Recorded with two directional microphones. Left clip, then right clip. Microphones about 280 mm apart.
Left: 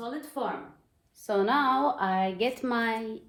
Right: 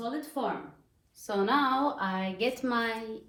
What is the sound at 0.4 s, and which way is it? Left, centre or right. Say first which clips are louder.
Speech: left 1 dB; centre.